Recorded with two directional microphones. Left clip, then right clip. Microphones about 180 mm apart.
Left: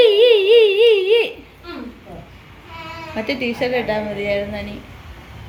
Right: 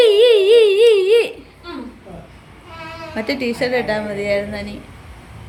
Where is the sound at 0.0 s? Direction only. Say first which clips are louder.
Right 1 dB; 10° right (ahead or behind).